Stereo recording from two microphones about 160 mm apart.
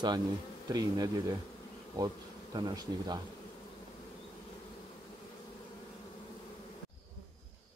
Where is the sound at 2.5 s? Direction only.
25° right (ahead or behind).